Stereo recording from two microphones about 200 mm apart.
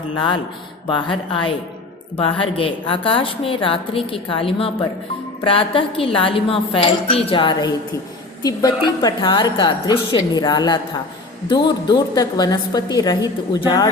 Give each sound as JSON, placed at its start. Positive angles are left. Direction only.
{"t": 0.9, "sound": "a woman's voice", "side_deg": 25}